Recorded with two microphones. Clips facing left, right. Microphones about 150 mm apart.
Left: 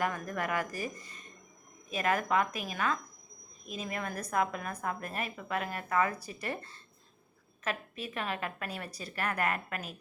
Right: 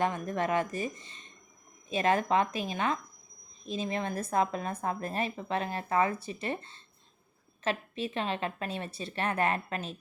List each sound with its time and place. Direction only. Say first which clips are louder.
0.0 s a woman's voice: right 4 dB; 25° right (ahead or behind)